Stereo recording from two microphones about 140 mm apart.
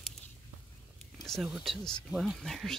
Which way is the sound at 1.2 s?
Centre (ahead or behind).